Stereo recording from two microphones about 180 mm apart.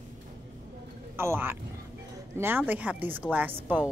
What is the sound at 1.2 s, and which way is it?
Speech, 15° right (ahead or behind).